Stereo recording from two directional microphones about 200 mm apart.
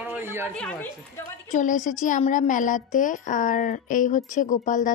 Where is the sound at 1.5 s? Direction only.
40° left (ahead or behind).